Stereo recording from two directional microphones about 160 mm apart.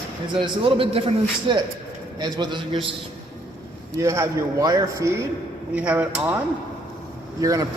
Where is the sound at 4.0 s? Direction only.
20° right (ahead or behind).